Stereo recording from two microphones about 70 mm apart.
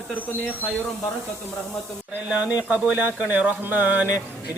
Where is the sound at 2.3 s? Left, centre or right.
Centre.